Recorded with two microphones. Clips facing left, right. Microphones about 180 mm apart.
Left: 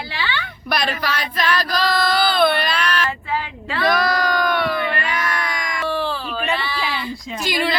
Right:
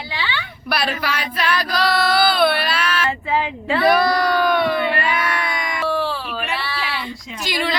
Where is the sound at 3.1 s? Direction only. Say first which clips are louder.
Right 4 dB; 25° right (ahead or behind).